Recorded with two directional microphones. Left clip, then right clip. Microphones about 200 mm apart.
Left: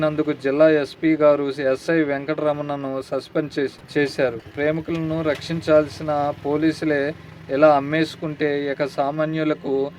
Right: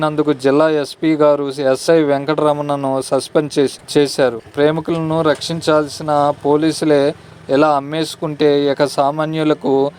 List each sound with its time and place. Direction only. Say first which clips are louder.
0.0 s speech: right 6 dB; 35° right (ahead or behind)